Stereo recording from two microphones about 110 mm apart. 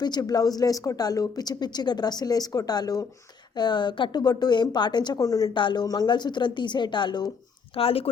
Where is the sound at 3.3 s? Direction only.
40° left (ahead or behind).